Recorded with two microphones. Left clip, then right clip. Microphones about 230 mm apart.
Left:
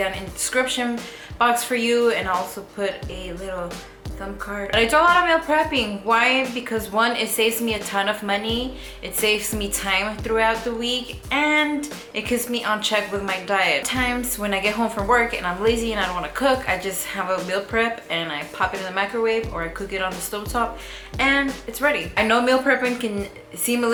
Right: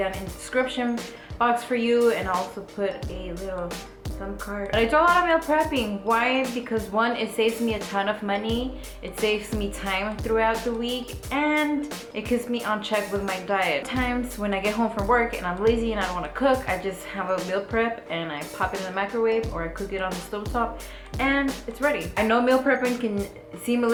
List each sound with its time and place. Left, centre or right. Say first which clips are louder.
0.0 s a woman's voice: left 3 dB; centre
3.4 s a woman's voice: left 1 dB; centre